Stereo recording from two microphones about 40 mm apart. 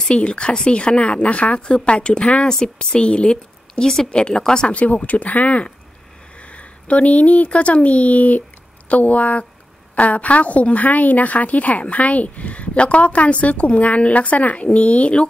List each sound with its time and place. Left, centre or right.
0.0 s speech: left
3.8 s a woman's voice: centre
4.6 s a woman's voice: left